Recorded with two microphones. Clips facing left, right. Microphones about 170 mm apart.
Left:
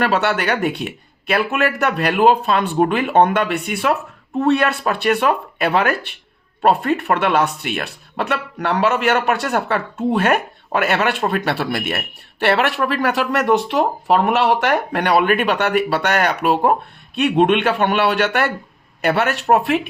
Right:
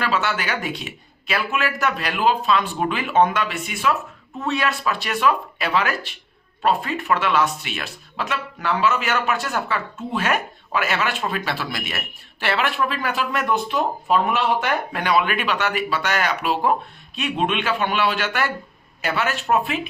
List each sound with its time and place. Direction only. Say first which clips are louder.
0.0 s speech: left 6 dB; 60° left (ahead or behind)